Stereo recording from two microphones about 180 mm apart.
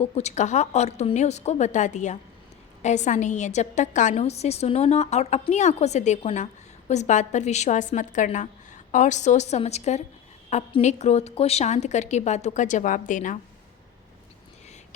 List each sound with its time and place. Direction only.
0.0 s a woman's voice: 35° left (ahead or behind)